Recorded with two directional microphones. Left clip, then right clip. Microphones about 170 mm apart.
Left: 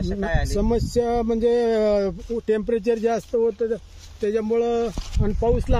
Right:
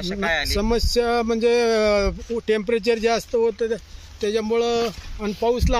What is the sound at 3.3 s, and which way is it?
Speech, 45° left (ahead or behind).